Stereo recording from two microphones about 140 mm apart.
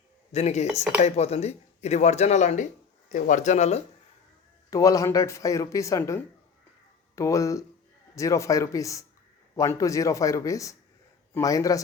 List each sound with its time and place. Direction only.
0.3 s speech: 50° left (ahead or behind)
4.7 s speech: 25° left (ahead or behind)